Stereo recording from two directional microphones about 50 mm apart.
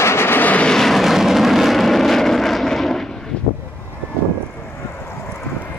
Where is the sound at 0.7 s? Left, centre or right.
Centre.